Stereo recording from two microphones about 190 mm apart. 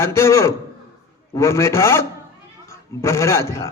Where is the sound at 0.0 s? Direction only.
15° left (ahead or behind).